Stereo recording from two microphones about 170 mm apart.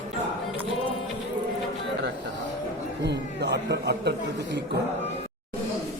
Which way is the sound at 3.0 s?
85° right.